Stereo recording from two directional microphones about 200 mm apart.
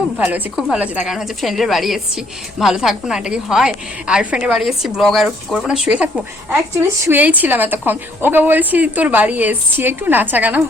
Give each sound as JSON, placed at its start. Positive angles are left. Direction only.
{"t": 0.2, "sound": "a woman's voice", "side_deg": -10}